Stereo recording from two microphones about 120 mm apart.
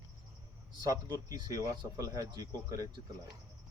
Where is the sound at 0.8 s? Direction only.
30° right (ahead or behind).